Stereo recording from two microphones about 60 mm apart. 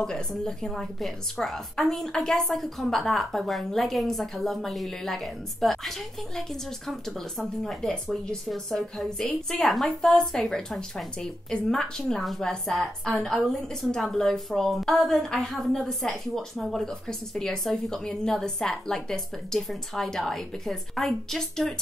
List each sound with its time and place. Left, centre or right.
0.0 s a woman's voice: centre